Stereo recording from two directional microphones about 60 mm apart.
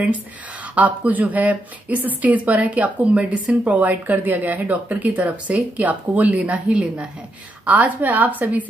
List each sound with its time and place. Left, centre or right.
0.7 s speech: right